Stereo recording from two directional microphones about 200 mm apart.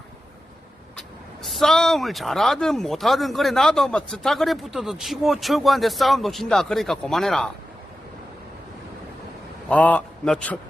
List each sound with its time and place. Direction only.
1.5 s speech: centre (ahead or behind)
9.6 s a man's voice: 5° left (ahead or behind)